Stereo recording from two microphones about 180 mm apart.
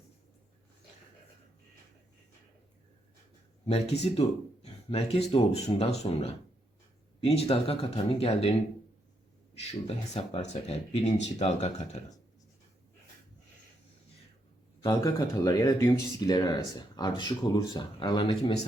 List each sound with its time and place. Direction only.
3.7 s speech: 35° left (ahead or behind)
9.6 s speech: 35° left (ahead or behind)
14.8 s speech: 20° left (ahead or behind)